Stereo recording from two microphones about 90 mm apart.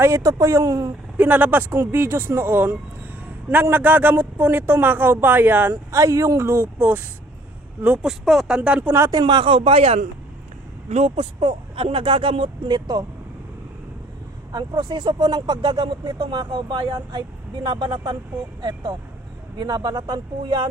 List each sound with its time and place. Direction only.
0.0 s a man's voice: 35° right (ahead or behind)
1.1 s a man's voice: 20° right (ahead or behind)
5.7 s a man's voice: 35° right (ahead or behind); by 8.0 s 20° right (ahead or behind)
8.0 s speech: centre (ahead or behind)
8.9 s a man's voice: 30° right (ahead or behind)
9.2 s speech: 65° right (ahead or behind)
11.2 s speech: 65° right (ahead or behind)
14.5 s speech: 50° right (ahead or behind)
16.1 s speech: 65° right (ahead or behind)
18.6 s speech: 50° right (ahead or behind)